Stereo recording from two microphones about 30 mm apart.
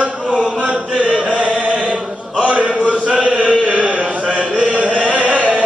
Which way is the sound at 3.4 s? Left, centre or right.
Left.